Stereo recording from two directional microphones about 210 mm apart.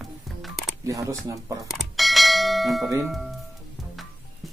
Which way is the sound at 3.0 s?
Centre (ahead or behind).